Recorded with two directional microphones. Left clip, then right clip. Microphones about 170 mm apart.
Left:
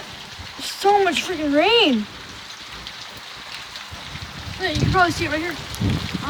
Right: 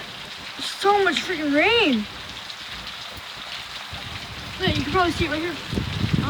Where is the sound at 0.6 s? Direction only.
Centre (ahead or behind).